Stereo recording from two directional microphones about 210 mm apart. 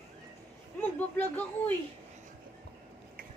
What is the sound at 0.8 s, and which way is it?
Speech, 10° left (ahead or behind).